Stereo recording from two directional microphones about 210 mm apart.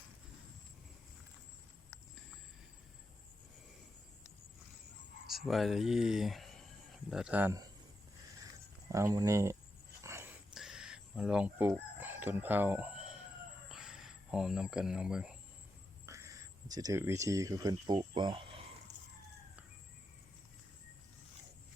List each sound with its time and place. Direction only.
5.3 s speech: centre (ahead or behind)
8.9 s speech: 15° right (ahead or behind)
10.0 s whispering: 15° right (ahead or behind)
10.5 s chicken: centre (ahead or behind)
13.7 s a sound: centre (ahead or behind)
16.0 s speech: 15° right (ahead or behind)